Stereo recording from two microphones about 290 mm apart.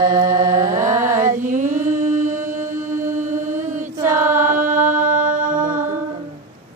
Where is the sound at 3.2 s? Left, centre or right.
Right.